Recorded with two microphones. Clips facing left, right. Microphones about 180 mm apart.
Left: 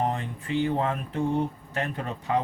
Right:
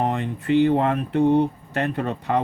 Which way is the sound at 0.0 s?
70° right (ahead or behind).